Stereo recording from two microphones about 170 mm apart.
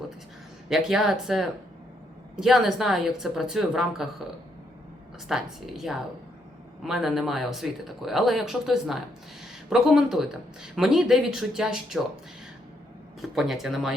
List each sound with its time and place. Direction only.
0.7 s speech: 5° right (ahead or behind)
5.3 s speech: centre (ahead or behind)
13.3 s speech: centre (ahead or behind)